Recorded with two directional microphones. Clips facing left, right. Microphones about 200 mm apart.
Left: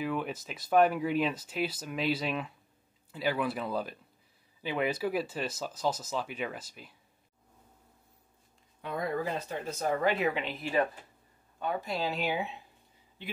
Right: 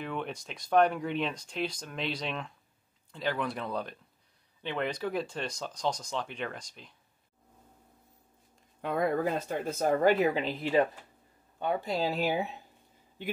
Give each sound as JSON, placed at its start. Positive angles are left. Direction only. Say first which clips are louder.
{"t": 0.0, "sound": "speech", "louder": "left 3 dB", "side_deg": 5}
{"t": 8.8, "sound": "speech", "louder": "right 4 dB", "side_deg": -55}